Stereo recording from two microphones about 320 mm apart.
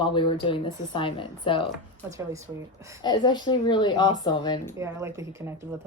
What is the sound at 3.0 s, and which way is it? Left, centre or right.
A woman's voice, centre.